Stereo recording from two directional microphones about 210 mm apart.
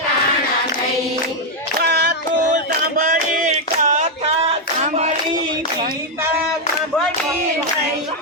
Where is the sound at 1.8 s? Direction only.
50° right (ahead or behind); by 5.4 s 35° right (ahead or behind).